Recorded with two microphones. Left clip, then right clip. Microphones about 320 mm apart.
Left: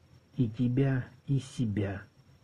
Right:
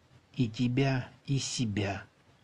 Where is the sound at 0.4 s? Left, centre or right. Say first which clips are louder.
Even; centre.